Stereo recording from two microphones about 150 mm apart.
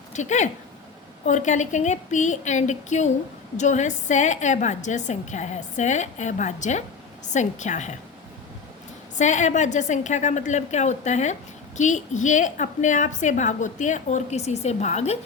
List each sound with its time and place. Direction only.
0.1 s a woman's voice: 55° left (ahead or behind)
9.1 s a woman's voice: 55° left (ahead or behind)